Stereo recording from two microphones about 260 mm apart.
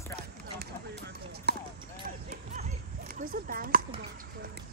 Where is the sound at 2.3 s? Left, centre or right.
Right.